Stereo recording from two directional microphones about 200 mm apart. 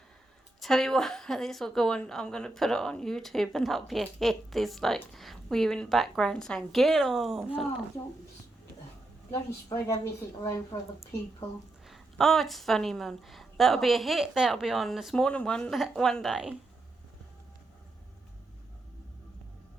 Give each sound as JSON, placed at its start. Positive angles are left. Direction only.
{"t": 0.6, "sound": "a woman's voice", "side_deg": 0}
{"t": 9.6, "sound": "a woman's voice", "side_deg": 15}
{"t": 11.9, "sound": "a woman's voice", "side_deg": 0}